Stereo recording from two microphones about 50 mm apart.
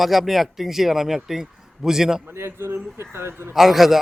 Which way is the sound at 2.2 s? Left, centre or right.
Right.